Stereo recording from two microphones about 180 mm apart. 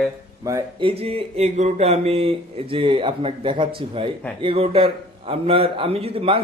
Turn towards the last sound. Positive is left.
turn(degrees=-30)  # may be behind; listen again after turning